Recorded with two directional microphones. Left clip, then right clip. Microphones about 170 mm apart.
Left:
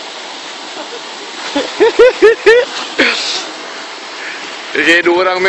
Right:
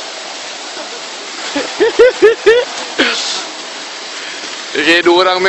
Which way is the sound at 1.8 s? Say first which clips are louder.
Left 1 dB; centre (ahead or behind).